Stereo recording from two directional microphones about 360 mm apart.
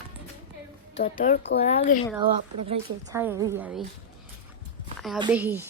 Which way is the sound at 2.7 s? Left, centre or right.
Centre.